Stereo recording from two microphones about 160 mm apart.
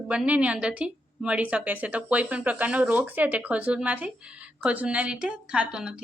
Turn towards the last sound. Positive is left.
turn(degrees=-5)  # may be behind; listen again after turning